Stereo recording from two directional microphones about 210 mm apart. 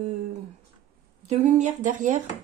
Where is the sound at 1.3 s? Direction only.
35° right (ahead or behind).